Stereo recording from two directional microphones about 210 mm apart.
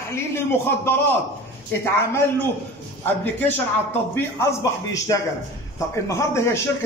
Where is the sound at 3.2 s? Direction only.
10° left (ahead or behind).